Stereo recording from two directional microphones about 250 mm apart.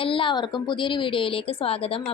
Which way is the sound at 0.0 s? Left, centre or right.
Left.